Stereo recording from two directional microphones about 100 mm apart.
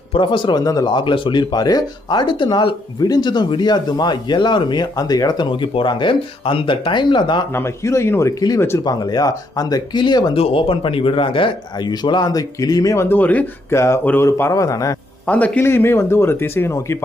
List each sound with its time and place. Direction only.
0.1 s speech: 55° left (ahead or behind)
0.6 s speech: 35° left (ahead or behind)
0.9 s speech: 50° left (ahead or behind)
7.5 s speech: 30° left (ahead or behind)
8.4 s speech: 40° left (ahead or behind)
10.3 s speech: 70° left (ahead or behind); by 13.1 s 35° left (ahead or behind)
13.1 s speech: 15° left (ahead or behind)
13.7 s speech: 30° left (ahead or behind)
14.0 s speech: 20° left (ahead or behind)
14.5 s speech: 35° left (ahead or behind)
15.3 s speech: 15° left (ahead or behind)